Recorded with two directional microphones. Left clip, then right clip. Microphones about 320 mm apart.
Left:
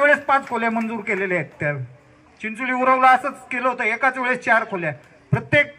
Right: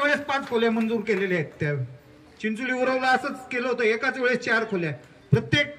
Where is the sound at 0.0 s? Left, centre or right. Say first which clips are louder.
Left 7 dB; centre.